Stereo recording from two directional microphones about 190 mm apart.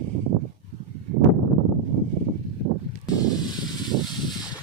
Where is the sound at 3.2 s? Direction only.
20° left (ahead or behind).